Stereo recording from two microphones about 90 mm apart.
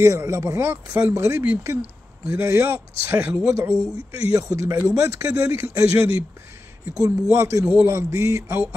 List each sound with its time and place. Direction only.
0.0 s a man's voice: 35° right (ahead or behind)